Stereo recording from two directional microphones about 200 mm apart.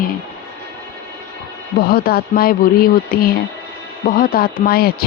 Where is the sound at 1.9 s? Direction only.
50° left (ahead or behind).